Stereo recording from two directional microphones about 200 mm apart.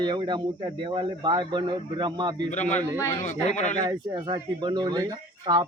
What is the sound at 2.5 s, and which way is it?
Speech, 35° left (ahead or behind).